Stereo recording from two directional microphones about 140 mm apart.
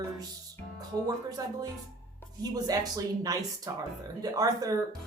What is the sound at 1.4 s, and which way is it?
Speech, 25° right (ahead or behind).